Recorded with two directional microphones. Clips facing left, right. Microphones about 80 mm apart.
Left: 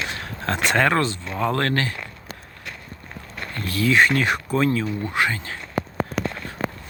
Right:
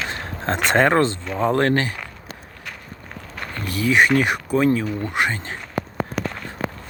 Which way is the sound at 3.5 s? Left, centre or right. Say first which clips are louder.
Even; centre.